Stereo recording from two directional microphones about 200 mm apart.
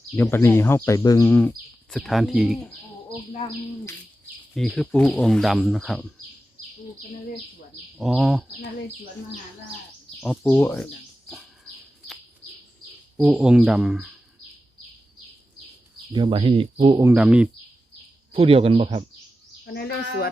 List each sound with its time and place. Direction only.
0.2 s speech: 10° left (ahead or behind)
2.0 s speech: centre (ahead or behind)
4.5 s speech: centre (ahead or behind)
7.9 s speech: centre (ahead or behind)
10.2 s speech: centre (ahead or behind)
13.1 s speech: 5° right (ahead or behind)
16.1 s speech: 25° right (ahead or behind)
17.0 s speech: 10° right (ahead or behind)
18.3 s speech: 30° right (ahead or behind)
19.6 s speech: 50° left (ahead or behind)